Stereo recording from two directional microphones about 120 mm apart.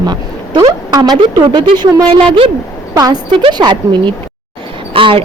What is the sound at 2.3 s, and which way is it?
Speech, 50° right (ahead or behind).